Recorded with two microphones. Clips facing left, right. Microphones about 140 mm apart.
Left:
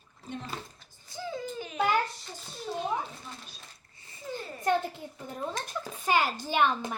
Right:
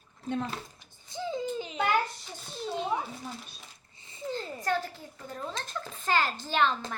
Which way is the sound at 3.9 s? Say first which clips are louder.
Right 8 dB; 20° right (ahead or behind).